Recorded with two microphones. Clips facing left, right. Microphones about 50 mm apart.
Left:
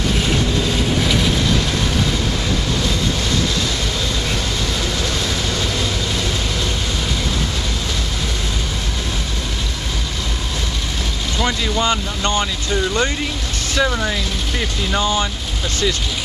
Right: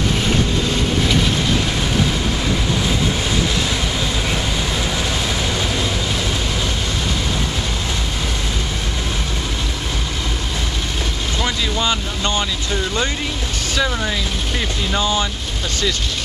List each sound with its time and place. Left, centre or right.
0.3 s vehicle: centre
5.5 s vehicle: centre
13.7 s speech: centre
15.0 s speech: centre